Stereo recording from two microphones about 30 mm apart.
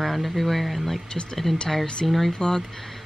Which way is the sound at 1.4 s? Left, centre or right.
Centre.